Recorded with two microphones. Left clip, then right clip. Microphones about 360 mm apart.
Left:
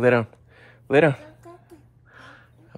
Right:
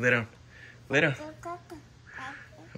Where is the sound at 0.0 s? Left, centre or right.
Centre.